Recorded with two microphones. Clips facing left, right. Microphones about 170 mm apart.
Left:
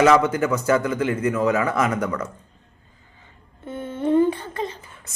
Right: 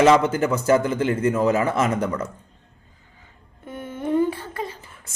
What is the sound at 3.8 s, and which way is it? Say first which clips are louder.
Humming: left 3 dB; 10° right (ahead or behind).